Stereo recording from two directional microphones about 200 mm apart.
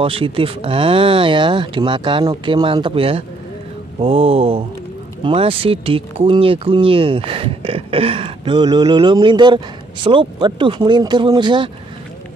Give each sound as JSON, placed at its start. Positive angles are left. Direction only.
{"t": 0.0, "sound": "speech", "side_deg": -30}